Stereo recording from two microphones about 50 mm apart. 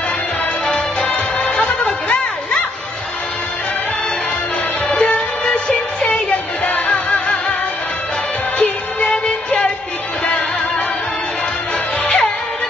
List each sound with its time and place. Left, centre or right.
0.7 s music: left
4.8 s music: left
8.5 s music: left
12.0 s music: left